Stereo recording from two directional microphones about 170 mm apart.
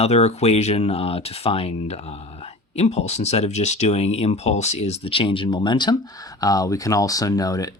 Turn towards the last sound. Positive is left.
turn(degrees=20)  # may be behind; listen again after turning